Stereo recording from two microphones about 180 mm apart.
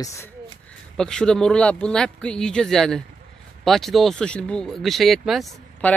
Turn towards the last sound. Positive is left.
turn(degrees=0)  # may be behind; listen again after turning